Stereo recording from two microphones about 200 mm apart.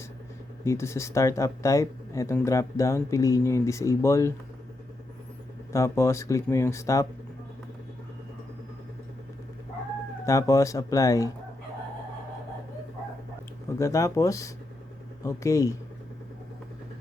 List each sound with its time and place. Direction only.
0.6 s speech: 15° left (ahead or behind)
5.7 s speech: 15° left (ahead or behind)
10.2 s speech: 15° left (ahead or behind)
13.7 s speech: 15° left (ahead or behind)